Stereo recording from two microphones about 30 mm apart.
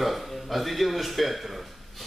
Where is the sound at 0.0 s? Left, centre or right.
Centre.